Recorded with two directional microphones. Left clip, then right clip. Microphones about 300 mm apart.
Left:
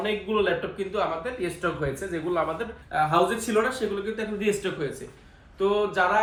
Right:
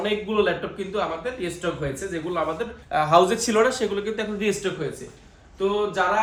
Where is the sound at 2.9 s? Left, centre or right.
Right.